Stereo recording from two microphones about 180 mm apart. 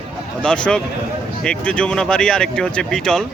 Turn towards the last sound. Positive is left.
turn(degrees=5)  # may be behind; listen again after turning